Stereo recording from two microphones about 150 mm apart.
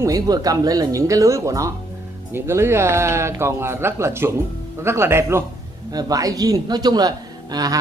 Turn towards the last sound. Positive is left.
turn(degrees=-25)  # may be behind; listen again after turning